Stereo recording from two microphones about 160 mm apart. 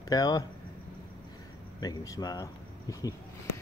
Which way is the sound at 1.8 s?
20° left (ahead or behind).